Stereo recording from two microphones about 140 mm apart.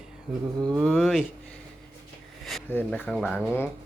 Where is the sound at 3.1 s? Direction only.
Centre (ahead or behind).